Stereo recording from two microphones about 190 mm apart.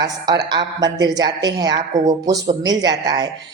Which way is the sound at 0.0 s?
20° right (ahead or behind).